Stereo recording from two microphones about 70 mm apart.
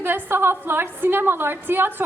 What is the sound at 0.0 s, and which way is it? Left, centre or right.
A woman's voice, right.